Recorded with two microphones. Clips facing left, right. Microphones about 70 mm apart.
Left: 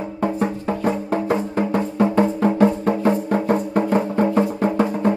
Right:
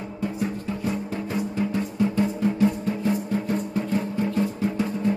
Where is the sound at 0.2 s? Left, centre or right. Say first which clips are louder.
Left 6 dB; left.